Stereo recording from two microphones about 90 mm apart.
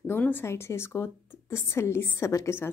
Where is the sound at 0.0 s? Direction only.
20° left (ahead or behind).